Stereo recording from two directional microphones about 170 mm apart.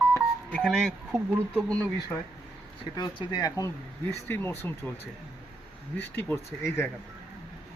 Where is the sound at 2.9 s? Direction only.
25° left (ahead or behind).